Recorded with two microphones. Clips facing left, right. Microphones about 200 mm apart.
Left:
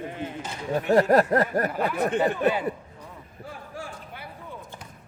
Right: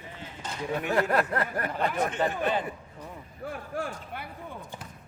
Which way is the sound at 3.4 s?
60° right (ahead or behind).